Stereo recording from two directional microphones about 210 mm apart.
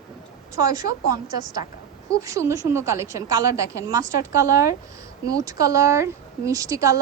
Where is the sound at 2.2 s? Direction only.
15° right (ahead or behind).